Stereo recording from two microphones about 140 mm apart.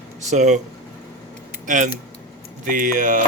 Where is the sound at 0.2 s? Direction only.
55° right (ahead or behind).